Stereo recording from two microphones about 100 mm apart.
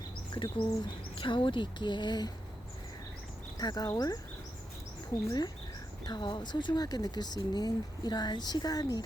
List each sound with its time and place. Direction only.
0.5 s speech: 55° left (ahead or behind)
3.6 s speech: 45° left (ahead or behind)
5.2 s speech: 35° left (ahead or behind)
6.1 s speech: 50° left (ahead or behind)